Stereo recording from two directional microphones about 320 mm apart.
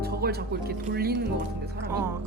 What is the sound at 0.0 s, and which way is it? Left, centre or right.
Speech, right.